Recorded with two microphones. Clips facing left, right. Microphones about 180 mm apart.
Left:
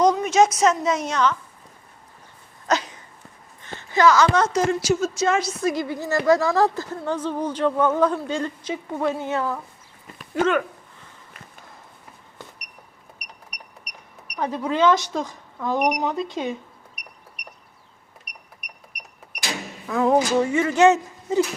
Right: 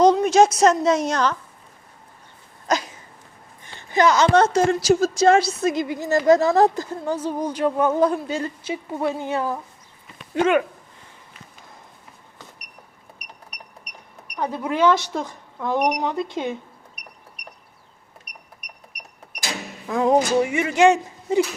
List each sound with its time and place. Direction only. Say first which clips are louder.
0.0 s a woman's voice: right 3 dB; 30° right (ahead or behind)
2.6 s a sound: even; 10° right (ahead or behind)
3.8 s speech: even; 20° right (ahead or behind)
4.9 s a woman's voice: right 5 dB; 45° right (ahead or behind)
5.2 s a woman's voice: right 8 dB; 30° right (ahead or behind)
5.6 s speech: right 2 dB; 20° right (ahead or behind)
14.5 s speech: even; 10° right (ahead or behind)
15.8 s speech: even; 10° left (ahead or behind)
19.9 s speech: right 1 dB; 20° right (ahead or behind)